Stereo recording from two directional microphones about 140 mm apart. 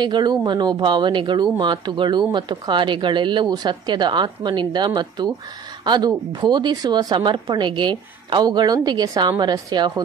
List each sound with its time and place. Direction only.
0.0 s speech: 30° right (ahead or behind)